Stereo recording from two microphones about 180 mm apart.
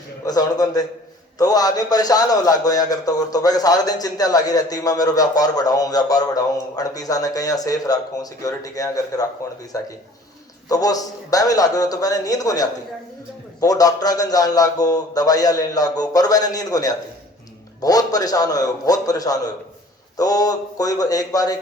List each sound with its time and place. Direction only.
0.3 s a man's voice: 20° left (ahead or behind)